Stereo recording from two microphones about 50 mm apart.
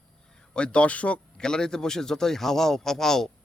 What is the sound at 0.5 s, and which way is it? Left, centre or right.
Speech, left.